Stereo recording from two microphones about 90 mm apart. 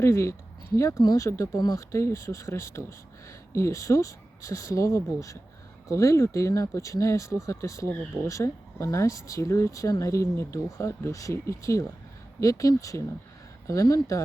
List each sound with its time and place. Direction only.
0.0 s speech: 30° left (ahead or behind)